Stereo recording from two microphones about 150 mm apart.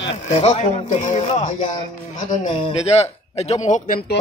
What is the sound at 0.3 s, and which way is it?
Speech, 45° left (ahead or behind).